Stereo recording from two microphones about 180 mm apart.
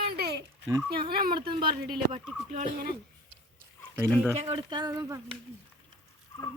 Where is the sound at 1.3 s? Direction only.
25° right (ahead or behind).